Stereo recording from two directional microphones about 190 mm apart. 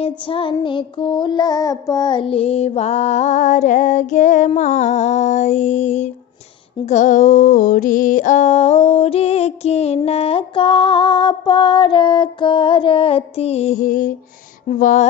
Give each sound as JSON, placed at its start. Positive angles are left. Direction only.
{"t": 0.0, "sound": "child singing", "side_deg": 30}
{"t": 10.0, "sound": "music", "side_deg": 30}
{"t": 14.7, "sound": "speech", "side_deg": 40}